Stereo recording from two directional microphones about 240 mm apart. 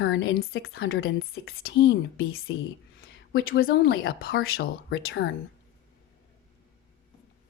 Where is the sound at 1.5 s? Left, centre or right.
Left.